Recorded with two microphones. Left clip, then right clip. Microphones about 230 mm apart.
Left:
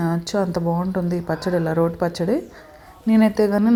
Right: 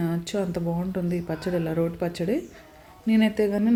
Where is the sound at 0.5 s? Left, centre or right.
Centre.